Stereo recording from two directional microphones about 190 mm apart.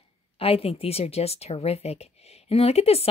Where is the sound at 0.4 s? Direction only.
30° left (ahead or behind).